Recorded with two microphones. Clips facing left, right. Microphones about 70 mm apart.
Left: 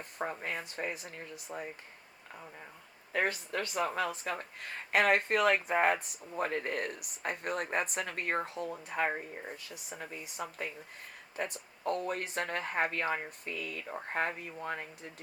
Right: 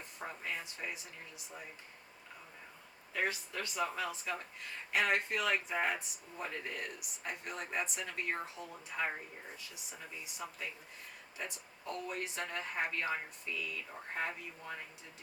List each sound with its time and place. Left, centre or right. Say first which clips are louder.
0.0 s speech: left 7 dB; left
3.1 s speech: left 5 dB; left